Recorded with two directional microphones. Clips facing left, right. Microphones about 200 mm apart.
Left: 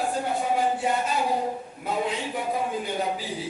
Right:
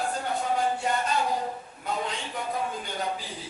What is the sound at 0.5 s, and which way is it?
A man's voice, 5° left (ahead or behind).